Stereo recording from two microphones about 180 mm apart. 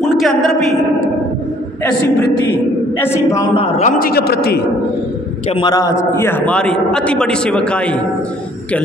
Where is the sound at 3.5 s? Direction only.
35° left (ahead or behind); by 4.6 s 60° left (ahead or behind).